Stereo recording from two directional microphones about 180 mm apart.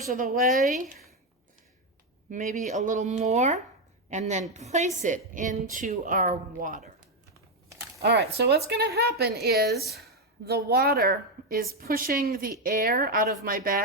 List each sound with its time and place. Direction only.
0.1 s a woman's voice: 50° right (ahead or behind)
2.3 s a woman's voice: 45° right (ahead or behind)
8.0 s a woman's voice: 65° right (ahead or behind)